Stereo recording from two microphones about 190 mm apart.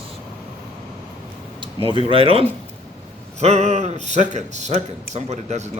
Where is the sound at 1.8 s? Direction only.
30° right (ahead or behind).